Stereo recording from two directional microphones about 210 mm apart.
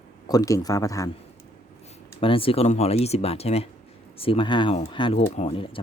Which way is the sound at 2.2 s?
25° left (ahead or behind).